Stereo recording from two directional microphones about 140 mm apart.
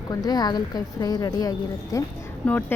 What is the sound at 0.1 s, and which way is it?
A woman's voice, 30° left (ahead or behind).